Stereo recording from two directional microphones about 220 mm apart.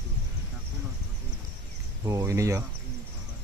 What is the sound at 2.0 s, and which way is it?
Speech, 15° right (ahead or behind).